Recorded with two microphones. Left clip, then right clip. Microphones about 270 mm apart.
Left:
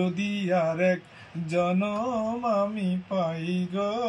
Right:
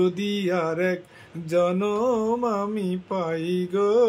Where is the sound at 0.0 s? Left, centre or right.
Centre.